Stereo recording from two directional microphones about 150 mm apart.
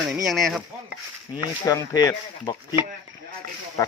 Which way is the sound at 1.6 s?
25° left (ahead or behind).